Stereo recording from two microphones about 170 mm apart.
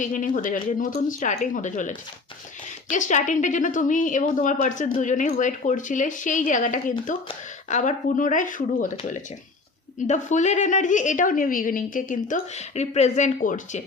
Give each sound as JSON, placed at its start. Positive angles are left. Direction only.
{"t": 0.0, "sound": "a woman's voice", "side_deg": 50}
{"t": 2.9, "sound": "a woman's voice", "side_deg": 45}